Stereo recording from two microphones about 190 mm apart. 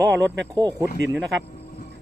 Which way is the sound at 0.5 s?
20° right (ahead or behind).